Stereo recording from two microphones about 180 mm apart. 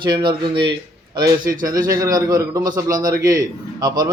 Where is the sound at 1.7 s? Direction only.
20° right (ahead or behind).